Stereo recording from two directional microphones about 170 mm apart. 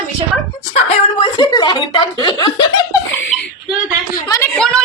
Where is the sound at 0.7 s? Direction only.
30° left (ahead or behind).